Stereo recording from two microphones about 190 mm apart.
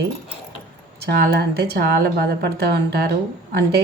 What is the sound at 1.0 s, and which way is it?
Speech, 60° right (ahead or behind).